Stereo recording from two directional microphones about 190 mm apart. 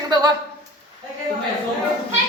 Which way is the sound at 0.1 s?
20° right (ahead or behind).